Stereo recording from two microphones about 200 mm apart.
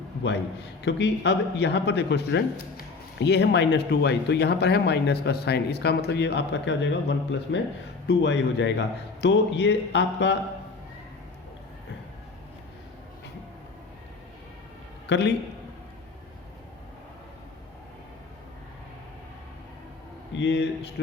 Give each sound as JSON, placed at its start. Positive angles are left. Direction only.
{"t": 0.9, "sound": "speech", "side_deg": 60}
{"t": 15.1, "sound": "speech", "side_deg": 60}
{"t": 20.3, "sound": "speech", "side_deg": 60}